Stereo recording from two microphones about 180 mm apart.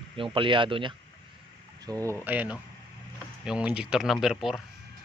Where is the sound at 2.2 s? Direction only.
10° right (ahead or behind).